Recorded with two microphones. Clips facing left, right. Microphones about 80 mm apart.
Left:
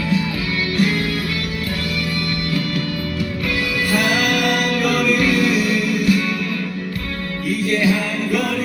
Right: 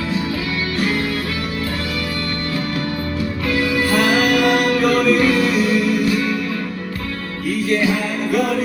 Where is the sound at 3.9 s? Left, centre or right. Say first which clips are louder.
Right 2 dB; right.